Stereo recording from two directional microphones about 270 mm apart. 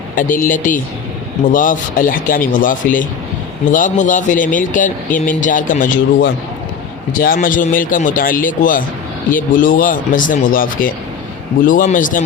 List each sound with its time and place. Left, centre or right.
0.2 s speech: left